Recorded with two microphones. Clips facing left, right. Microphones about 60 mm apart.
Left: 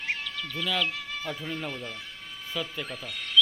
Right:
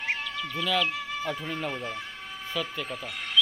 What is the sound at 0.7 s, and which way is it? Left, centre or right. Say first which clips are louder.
Speech: right 3 dB; centre.